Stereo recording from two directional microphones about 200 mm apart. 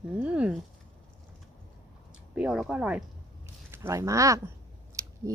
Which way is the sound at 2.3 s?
5° right (ahead or behind).